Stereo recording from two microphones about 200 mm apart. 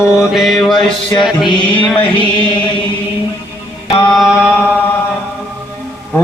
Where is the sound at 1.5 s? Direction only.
25° left (ahead or behind).